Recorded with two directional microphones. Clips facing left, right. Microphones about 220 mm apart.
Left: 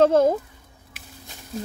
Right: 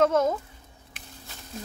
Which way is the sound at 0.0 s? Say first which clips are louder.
Left 5 dB; 30° left (ahead or behind).